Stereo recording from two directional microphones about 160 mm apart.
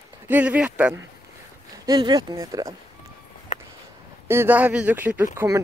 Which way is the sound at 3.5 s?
45° left (ahead or behind).